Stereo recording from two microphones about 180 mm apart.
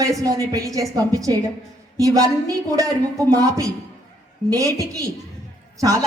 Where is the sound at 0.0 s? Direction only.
20° right (ahead or behind).